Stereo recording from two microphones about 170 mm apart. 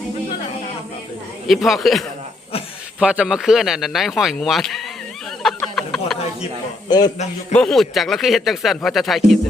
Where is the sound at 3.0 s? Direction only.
5° right (ahead or behind).